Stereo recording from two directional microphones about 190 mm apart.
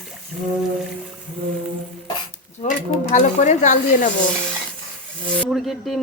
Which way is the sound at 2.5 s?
40° left (ahead or behind).